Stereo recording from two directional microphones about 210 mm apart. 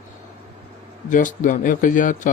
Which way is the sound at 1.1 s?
40° left (ahead or behind).